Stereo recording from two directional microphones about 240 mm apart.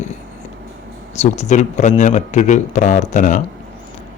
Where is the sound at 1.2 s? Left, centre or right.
Left.